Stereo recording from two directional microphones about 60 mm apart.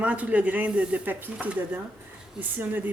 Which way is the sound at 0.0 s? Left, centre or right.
Right.